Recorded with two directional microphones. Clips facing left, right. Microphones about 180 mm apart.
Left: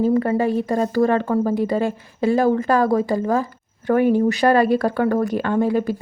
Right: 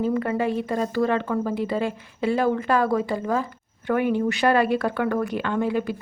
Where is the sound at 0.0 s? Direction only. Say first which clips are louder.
Left 5 dB; 35° left (ahead or behind).